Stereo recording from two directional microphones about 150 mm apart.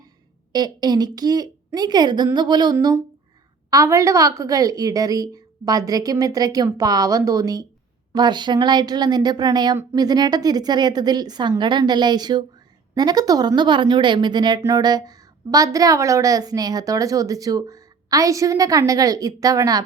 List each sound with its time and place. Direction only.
0.5 s a woman's voice: 25° right (ahead or behind)